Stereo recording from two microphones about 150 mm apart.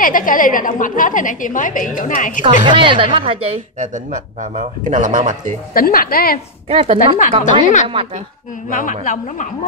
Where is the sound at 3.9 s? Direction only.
60° right (ahead or behind).